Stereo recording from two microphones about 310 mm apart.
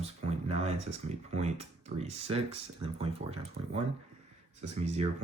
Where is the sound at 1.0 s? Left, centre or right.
Right.